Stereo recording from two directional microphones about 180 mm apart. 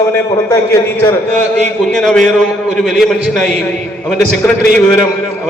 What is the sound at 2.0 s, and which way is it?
A man's voice, 5° left (ahead or behind).